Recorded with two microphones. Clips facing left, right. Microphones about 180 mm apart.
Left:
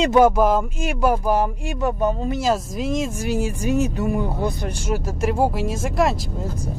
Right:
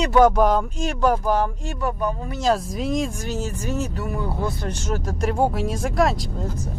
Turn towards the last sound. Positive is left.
turn(degrees=0)  # may be behind; listen again after turning